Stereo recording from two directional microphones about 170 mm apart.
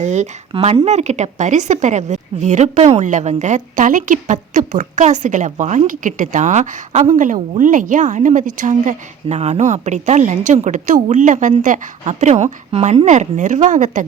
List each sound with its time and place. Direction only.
0.0 s speech: 45° right (ahead or behind)